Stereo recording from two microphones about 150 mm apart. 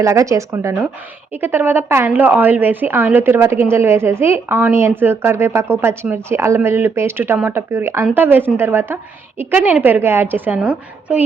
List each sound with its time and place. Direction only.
0.0 s a woman's voice: 20° right (ahead or behind)